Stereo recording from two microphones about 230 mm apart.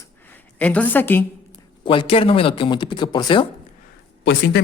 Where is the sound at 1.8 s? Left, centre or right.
Left.